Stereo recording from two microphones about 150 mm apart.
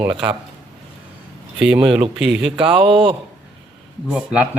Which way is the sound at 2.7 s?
35° right (ahead or behind).